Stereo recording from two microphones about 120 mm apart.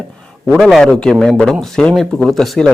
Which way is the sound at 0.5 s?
5° left (ahead or behind).